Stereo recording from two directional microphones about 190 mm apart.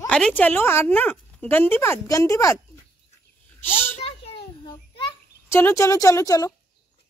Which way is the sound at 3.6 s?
10° left (ahead or behind).